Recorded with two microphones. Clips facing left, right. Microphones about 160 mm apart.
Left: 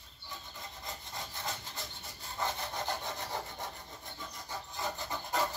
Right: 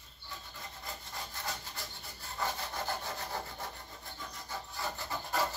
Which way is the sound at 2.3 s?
20° left (ahead or behind).